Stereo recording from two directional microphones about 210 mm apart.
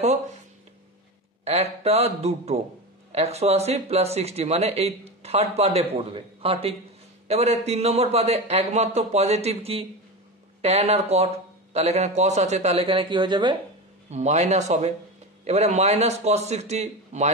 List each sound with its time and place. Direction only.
1.4 s a man's voice: 30° right (ahead or behind)
14.1 s a man's voice: 35° right (ahead or behind)